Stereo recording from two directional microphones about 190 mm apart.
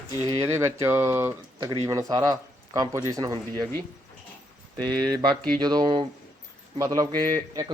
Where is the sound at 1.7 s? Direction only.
30° right (ahead or behind).